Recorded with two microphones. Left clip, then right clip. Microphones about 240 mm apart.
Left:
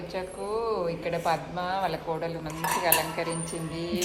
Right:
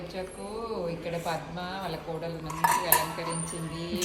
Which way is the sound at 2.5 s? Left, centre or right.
Centre.